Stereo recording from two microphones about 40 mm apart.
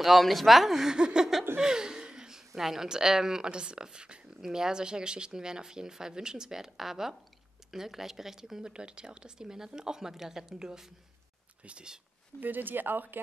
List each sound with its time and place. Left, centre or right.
0.0 s a woman's voice: centre
0.9 s a sound: centre
1.6 s speech: centre
12.4 s speech: right